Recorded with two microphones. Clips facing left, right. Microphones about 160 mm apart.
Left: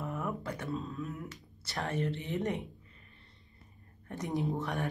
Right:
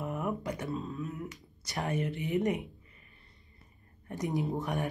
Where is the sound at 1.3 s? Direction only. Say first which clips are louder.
Right 2 dB; 15° right (ahead or behind).